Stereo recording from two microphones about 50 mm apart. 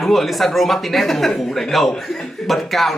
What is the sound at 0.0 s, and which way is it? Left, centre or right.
A man's voice, centre.